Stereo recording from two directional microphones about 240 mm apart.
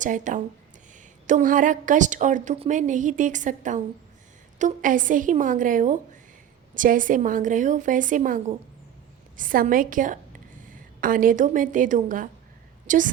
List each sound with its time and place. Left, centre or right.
0.0 s a woman's voice: right